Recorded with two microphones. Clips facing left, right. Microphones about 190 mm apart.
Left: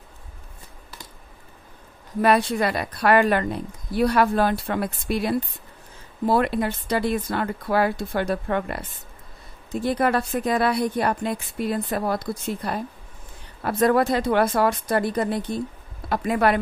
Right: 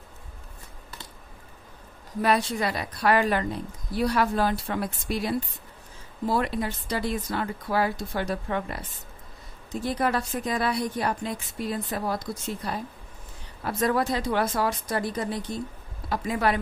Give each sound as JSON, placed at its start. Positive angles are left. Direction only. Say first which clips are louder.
{"t": 2.2, "sound": "a woman's voice", "louder": "left 5 dB", "side_deg": 60}
{"t": 6.2, "sound": "a woman's voice", "louder": "left 5 dB", "side_deg": 60}